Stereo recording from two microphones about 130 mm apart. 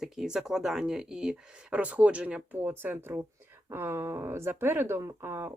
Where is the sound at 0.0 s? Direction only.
5° right (ahead or behind).